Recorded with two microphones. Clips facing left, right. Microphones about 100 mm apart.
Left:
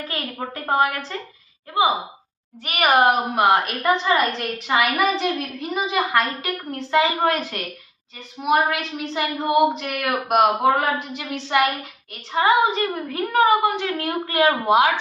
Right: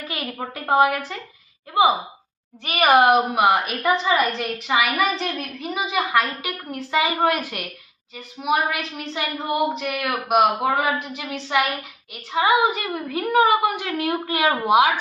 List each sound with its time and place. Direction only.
0.6 s a woman's voice: 5° right (ahead or behind)
2.6 s a woman's voice: 20° right (ahead or behind)
3.4 s a woman's voice: 5° right (ahead or behind)
13.1 s a woman's voice: 15° right (ahead or behind)